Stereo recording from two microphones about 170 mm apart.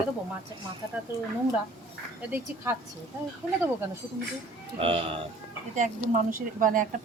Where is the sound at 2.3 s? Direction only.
10° right (ahead or behind).